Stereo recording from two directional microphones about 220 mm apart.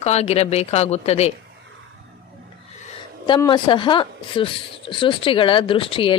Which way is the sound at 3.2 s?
20° left (ahead or behind).